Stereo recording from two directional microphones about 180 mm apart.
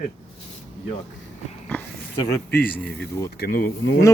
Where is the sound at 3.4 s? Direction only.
55° left (ahead or behind).